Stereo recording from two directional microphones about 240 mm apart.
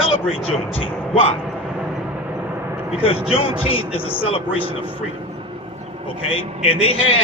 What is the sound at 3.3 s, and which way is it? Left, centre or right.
Speech, left.